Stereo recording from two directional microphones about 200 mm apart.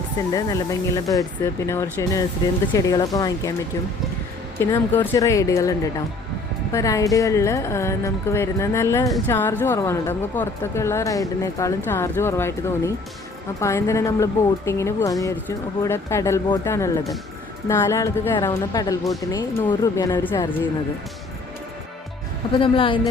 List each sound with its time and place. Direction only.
0.3 s a woman's voice: 15° left (ahead or behind)
4.6 s a woman's voice: 15° left (ahead or behind)
22.5 s speech: 25° left (ahead or behind)